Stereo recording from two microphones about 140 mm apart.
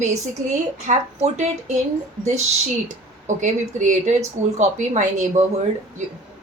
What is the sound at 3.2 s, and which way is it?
Speech, 65° right (ahead or behind).